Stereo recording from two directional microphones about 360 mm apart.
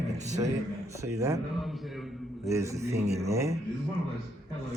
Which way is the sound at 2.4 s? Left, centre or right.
Centre.